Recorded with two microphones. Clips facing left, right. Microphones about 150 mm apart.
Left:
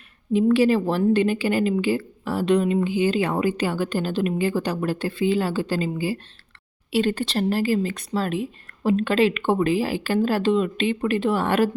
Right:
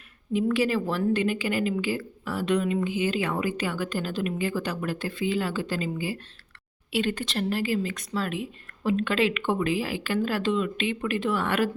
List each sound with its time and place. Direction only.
0.3 s a woman's voice: 30° left (ahead or behind)